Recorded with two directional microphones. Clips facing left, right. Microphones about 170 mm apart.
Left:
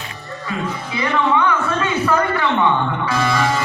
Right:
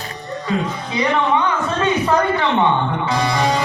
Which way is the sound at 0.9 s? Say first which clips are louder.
Right 1 dB; 20° right (ahead or behind).